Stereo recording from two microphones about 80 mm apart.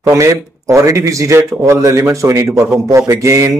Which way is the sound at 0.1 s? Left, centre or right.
Right.